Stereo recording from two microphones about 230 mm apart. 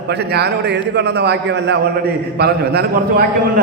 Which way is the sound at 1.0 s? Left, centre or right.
Right.